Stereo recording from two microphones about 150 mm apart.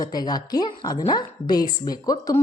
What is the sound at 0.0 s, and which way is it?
A woman's voice, 25° left (ahead or behind).